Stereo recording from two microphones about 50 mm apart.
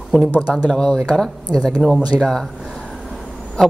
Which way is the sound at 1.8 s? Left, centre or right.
Centre.